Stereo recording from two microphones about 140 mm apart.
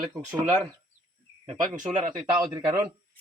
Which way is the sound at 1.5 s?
65° right (ahead or behind).